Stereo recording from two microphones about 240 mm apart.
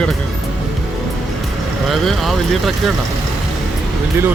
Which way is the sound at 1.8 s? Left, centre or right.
Centre.